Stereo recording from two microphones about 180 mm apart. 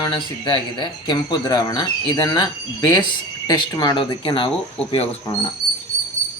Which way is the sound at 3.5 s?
25° left (ahead or behind).